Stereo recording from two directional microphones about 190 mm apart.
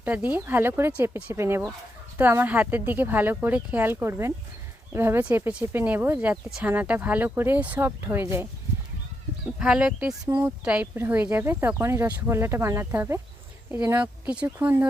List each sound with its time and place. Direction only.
0.0 s speech: 10° right (ahead or behind)
9.6 s speech: 5° right (ahead or behind)
10.2 s speech: 15° right (ahead or behind)